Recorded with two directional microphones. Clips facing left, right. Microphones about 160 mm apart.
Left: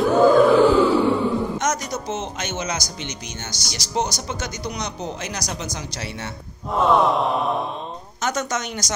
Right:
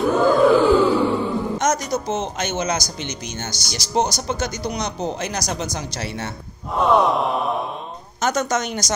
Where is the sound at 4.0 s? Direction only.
35° right (ahead or behind).